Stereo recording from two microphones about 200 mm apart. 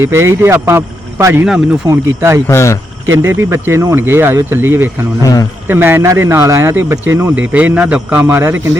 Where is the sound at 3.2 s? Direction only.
15° right (ahead or behind).